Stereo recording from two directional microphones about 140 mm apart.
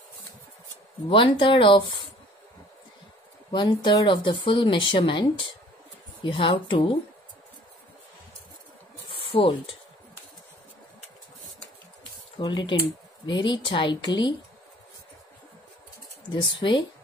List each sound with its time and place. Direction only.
1.1 s speech: 35° left (ahead or behind)
3.5 s speech: 30° left (ahead or behind)
9.1 s speech: 40° left (ahead or behind)
12.4 s speech: 35° left (ahead or behind)
16.3 s speech: 35° left (ahead or behind)